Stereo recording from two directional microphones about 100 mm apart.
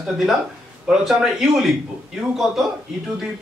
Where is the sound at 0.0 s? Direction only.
Centre (ahead or behind).